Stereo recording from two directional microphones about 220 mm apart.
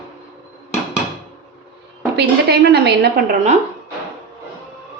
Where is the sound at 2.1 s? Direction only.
50° right (ahead or behind).